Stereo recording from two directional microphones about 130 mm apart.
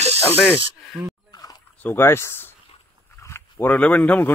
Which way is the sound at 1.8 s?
15° left (ahead or behind).